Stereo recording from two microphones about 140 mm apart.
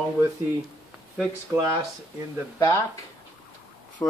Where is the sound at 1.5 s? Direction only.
20° right (ahead or behind).